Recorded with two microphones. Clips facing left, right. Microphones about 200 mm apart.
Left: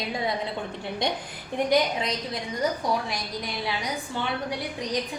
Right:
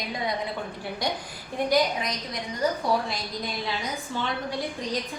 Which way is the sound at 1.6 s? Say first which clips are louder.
Even; 25° left (ahead or behind).